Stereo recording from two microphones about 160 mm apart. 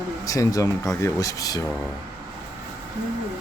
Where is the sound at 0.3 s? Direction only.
20° left (ahead or behind).